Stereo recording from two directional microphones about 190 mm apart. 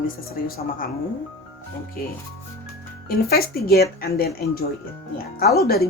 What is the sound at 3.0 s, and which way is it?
Speech, 55° left (ahead or behind).